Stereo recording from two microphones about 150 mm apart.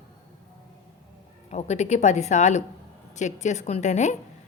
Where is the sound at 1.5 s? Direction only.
50° left (ahead or behind).